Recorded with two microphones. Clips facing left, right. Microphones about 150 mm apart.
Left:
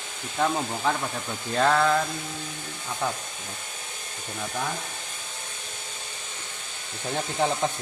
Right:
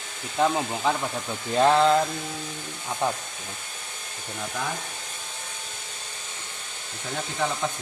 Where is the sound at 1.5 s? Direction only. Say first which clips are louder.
Right 3 dB; 15° right (ahead or behind).